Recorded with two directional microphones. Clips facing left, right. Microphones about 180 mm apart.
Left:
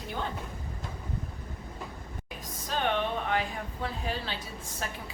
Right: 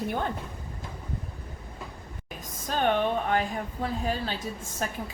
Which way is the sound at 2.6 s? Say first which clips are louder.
Right 4 dB; 45° right (ahead or behind).